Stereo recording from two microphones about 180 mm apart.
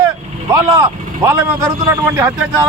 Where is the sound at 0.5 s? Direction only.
15° right (ahead or behind).